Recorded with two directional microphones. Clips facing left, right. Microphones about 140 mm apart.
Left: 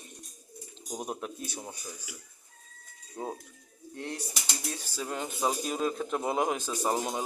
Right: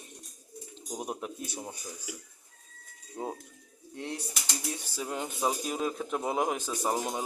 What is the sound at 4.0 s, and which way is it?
Speech, 20° right (ahead or behind).